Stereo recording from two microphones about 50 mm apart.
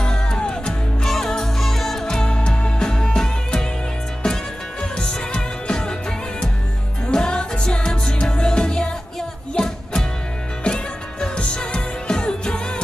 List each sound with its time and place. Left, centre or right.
0.0 s music: centre
4.9 s music: centre
7.1 s music: centre